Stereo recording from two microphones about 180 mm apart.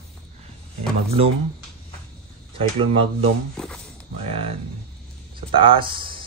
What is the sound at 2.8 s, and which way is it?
Speech, 30° right (ahead or behind).